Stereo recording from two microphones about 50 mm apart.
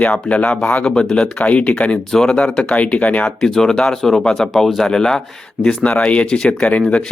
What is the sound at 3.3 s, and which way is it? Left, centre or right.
Speech, centre.